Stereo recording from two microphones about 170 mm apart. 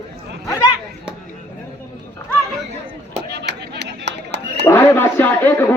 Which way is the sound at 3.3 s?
80° right.